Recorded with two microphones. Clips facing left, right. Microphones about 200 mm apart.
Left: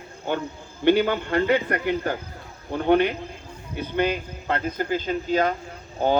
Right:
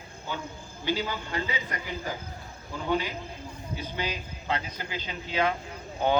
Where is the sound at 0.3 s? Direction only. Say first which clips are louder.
Left 9 dB; 65° left (ahead or behind).